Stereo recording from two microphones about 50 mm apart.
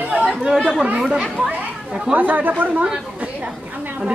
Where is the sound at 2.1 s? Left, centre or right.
Right.